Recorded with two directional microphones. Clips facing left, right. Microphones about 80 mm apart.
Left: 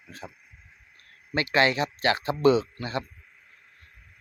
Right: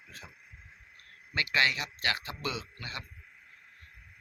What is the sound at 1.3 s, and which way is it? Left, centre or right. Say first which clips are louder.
Speech: left 6 dB; left.